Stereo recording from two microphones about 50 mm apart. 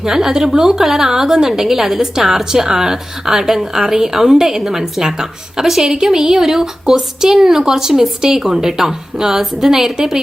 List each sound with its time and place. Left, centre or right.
0.0 s a woman's voice: centre